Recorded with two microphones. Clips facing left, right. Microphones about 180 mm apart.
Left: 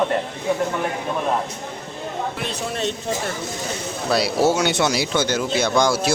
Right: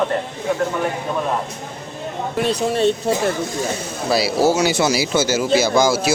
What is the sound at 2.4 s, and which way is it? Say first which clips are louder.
Speech: right 13 dB; 40° right (ahead or behind).